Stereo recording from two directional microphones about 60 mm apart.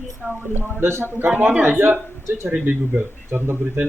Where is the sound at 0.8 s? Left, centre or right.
Right.